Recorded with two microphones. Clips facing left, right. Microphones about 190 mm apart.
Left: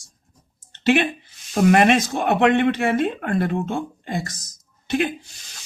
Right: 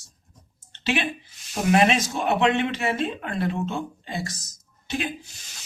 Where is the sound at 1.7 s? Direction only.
60° left (ahead or behind).